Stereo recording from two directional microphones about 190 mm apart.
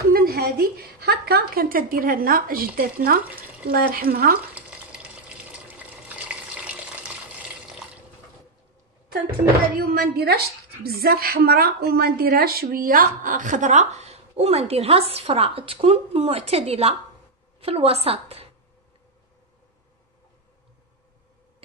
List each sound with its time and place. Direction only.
0.1 s a woman's voice: 50° right (ahead or behind)
4.6 s water: 5° right (ahead or behind)
9.8 s a woman's voice: 55° right (ahead or behind); by 18.5 s 30° right (ahead or behind)